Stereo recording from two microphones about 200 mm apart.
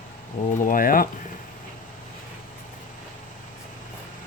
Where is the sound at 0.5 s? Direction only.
40° left (ahead or behind).